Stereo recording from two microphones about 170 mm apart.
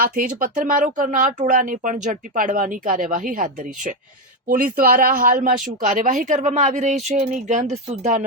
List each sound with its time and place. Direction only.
0.0 s speech: 55° right (ahead or behind); by 8.2 s 40° right (ahead or behind)